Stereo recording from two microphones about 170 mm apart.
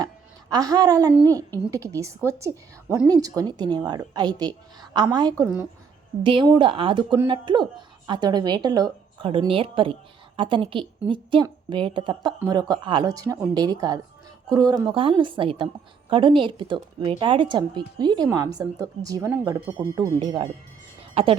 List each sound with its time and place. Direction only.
0.5 s a woman's voice: 20° right (ahead or behind)
21.2 s a woman's voice: 35° right (ahead or behind)